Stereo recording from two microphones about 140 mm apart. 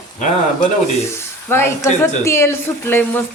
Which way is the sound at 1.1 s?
15° left (ahead or behind).